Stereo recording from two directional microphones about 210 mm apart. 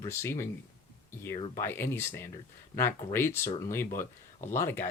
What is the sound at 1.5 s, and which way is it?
Speech, 10° left (ahead or behind).